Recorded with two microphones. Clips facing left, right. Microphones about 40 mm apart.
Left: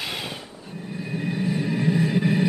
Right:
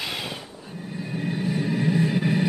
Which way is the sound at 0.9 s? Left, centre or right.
Centre.